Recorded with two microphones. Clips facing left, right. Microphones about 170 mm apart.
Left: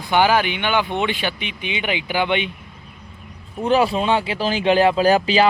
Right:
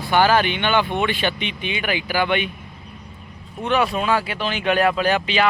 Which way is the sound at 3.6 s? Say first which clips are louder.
Left 3 dB; 30° left (ahead or behind).